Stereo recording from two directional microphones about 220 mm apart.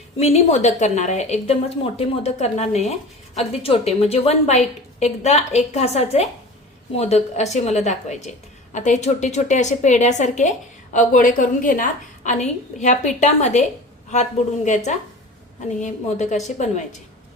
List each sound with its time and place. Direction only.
0.2 s a woman's voice: 30° left (ahead or behind)